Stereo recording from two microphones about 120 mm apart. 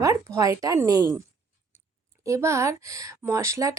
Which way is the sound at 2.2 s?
25° right (ahead or behind).